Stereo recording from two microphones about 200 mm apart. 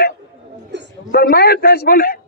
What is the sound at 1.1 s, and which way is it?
A man's voice, 50° left (ahead or behind).